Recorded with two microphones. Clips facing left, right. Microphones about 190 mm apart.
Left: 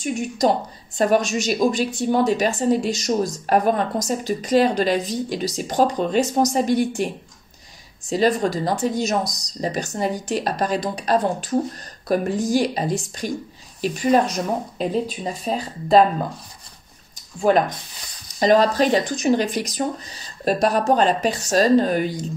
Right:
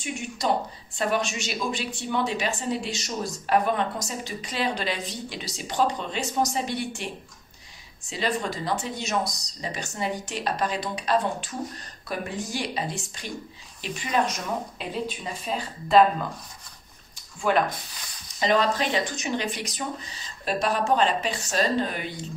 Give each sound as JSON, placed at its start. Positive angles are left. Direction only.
{"t": 0.4, "sound": "speech", "side_deg": 40}
{"t": 8.1, "sound": "speech", "side_deg": 40}
{"t": 17.4, "sound": "speech", "side_deg": 40}